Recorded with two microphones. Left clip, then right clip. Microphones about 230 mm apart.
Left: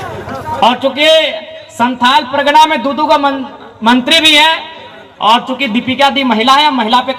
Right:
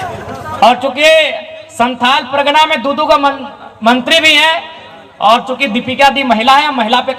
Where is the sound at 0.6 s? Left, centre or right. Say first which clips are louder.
Right 2 dB; right.